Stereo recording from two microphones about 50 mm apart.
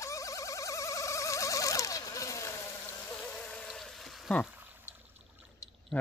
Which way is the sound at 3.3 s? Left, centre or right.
Centre.